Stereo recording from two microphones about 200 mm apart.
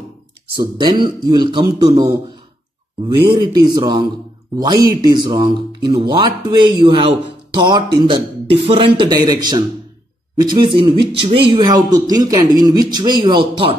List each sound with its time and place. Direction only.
0.6 s speech: 20° right (ahead or behind)
3.3 s speech: 20° right (ahead or behind)